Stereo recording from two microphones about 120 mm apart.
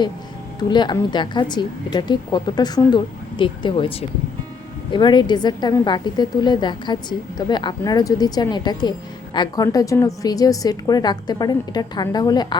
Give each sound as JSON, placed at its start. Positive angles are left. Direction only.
{"t": 0.7, "sound": "a woman's voice", "side_deg": 40}